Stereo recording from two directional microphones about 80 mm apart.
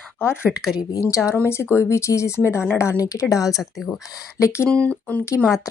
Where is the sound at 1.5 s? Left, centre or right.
Left.